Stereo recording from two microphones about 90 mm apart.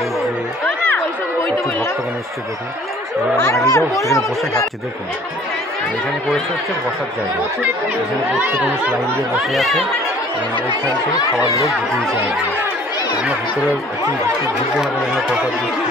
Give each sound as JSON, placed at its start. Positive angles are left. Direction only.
{"t": 0.7, "sound": "chatter", "side_deg": 15}
{"t": 3.4, "sound": "speech", "side_deg": 35}
{"t": 8.4, "sound": "speech", "side_deg": -15}
{"t": 9.4, "sound": "speech", "side_deg": 0}
{"t": 11.6, "sound": "speech", "side_deg": 0}
{"t": 14.8, "sound": "speech", "side_deg": -5}